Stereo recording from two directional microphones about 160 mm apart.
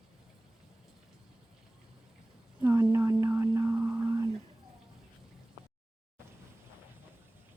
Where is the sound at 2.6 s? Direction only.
15° right (ahead or behind).